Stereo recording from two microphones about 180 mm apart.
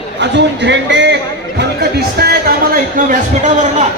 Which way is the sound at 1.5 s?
65° right (ahead or behind).